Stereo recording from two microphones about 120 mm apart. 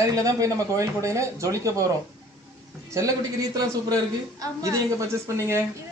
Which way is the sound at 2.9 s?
30° right (ahead or behind).